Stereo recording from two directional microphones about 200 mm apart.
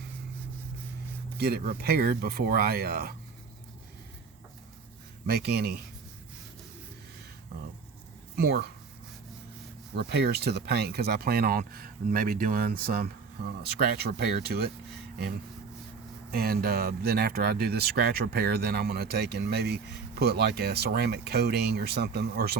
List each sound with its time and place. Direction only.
1.4 s speech: 50° right (ahead or behind)
5.2 s speech: 55° right (ahead or behind)
8.4 s speech: 50° right (ahead or behind)
9.9 s speech: 55° right (ahead or behind)
16.3 s speech: 50° right (ahead or behind)